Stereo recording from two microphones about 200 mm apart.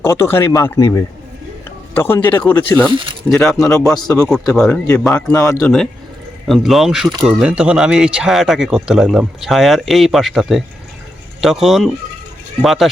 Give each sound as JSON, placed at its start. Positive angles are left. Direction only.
{"t": 0.0, "sound": "speech", "side_deg": 15}
{"t": 4.0, "sound": "speech", "side_deg": 15}
{"t": 4.5, "sound": "speech", "side_deg": 5}
{"t": 5.4, "sound": "speech", "side_deg": 15}
{"t": 6.5, "sound": "speech", "side_deg": 0}